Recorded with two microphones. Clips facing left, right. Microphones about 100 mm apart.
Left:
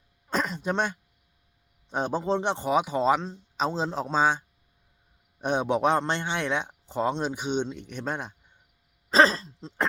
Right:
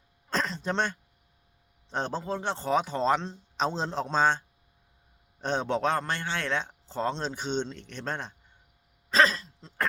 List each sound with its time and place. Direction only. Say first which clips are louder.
0.3 s a man's voice: left 2 dB; 10° left (ahead or behind)
2.2 s a man's voice: left 5 dB; 20° left (ahead or behind)
9.0 s speech: left 3 dB; 35° left (ahead or behind)